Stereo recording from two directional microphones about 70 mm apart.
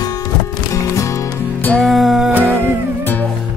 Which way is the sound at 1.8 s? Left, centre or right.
Centre.